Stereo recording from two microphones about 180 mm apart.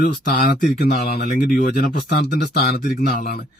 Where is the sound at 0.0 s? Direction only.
50° left (ahead or behind).